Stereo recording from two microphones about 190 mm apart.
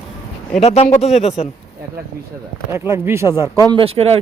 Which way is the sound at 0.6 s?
35° left (ahead or behind).